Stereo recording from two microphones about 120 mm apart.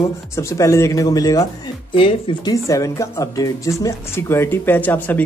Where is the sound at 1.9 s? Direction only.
45° left (ahead or behind).